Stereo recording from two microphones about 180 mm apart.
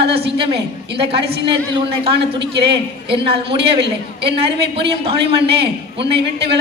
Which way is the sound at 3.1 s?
30° right (ahead or behind).